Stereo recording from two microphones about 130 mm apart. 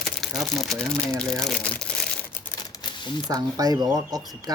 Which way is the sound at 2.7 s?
35° left (ahead or behind).